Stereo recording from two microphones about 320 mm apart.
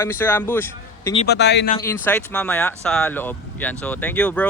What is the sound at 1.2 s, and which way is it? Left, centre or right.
Speech, left.